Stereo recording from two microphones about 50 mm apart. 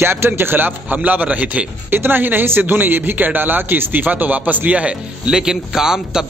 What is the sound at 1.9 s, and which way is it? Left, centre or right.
Speech, right.